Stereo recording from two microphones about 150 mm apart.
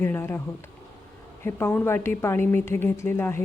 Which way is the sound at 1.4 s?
15° left (ahead or behind).